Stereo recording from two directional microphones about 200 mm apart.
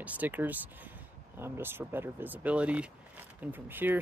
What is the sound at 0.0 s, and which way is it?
Speech, 10° right (ahead or behind).